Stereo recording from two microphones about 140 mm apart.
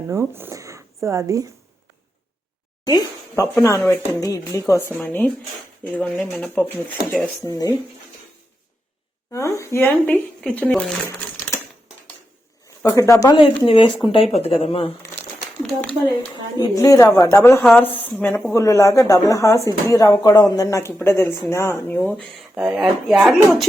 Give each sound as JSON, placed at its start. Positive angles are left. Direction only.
{"t": 0.1, "sound": "speech", "side_deg": -15}
{"t": 2.8, "sound": "speech", "side_deg": 25}
{"t": 4.9, "sound": "speech", "side_deg": 15}
{"t": 7.4, "sound": "speech", "side_deg": 25}
{"t": 9.3, "sound": "speech", "side_deg": 20}
{"t": 10.1, "sound": "speech", "side_deg": 10}
{"t": 12.8, "sound": "speech", "side_deg": 20}
{"t": 13.3, "sound": "speech", "side_deg": 40}
{"t": 16.6, "sound": "speech", "side_deg": 25}
{"t": 22.5, "sound": "speech", "side_deg": -5}